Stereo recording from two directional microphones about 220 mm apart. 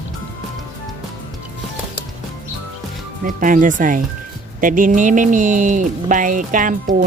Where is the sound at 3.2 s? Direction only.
35° right (ahead or behind).